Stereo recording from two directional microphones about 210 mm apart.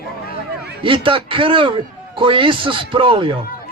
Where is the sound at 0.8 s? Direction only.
25° right (ahead or behind).